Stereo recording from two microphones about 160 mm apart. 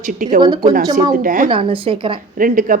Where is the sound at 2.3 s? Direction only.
60° right (ahead or behind).